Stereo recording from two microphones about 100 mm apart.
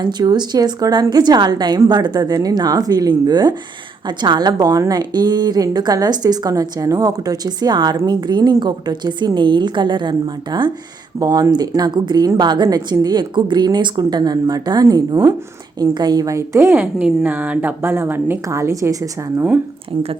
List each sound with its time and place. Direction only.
0.0 s a woman's voice: 45° right (ahead or behind); by 18.3 s 20° right (ahead or behind)
18.4 s speech: 30° right (ahead or behind)